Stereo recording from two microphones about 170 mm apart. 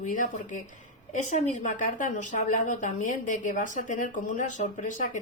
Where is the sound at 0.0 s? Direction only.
50° left (ahead or behind).